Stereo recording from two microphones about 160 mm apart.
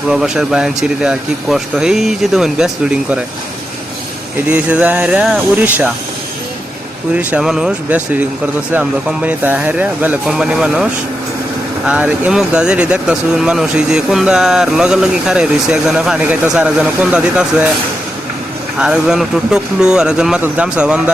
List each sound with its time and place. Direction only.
0.1 s speech: 5° right (ahead or behind)
4.4 s speech: 10° right (ahead or behind)
7.2 s speech: 5° right (ahead or behind)
11.9 s speech: 10° right (ahead or behind)
18.8 s speech: 5° right (ahead or behind)